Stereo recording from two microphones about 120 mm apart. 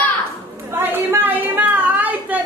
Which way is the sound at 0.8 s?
15° right (ahead or behind).